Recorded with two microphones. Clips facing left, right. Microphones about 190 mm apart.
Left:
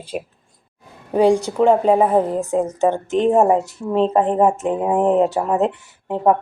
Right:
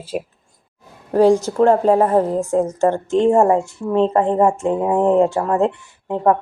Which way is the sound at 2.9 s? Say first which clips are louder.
Right 2 dB; 20° left (ahead or behind).